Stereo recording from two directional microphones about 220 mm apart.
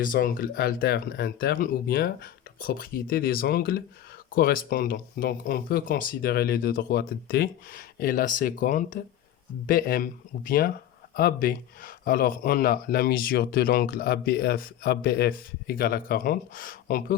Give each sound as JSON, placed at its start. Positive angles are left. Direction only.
{"t": 0.0, "sound": "speech", "side_deg": 40}